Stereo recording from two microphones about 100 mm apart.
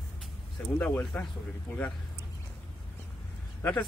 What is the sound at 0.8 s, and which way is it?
Speech, 15° left (ahead or behind).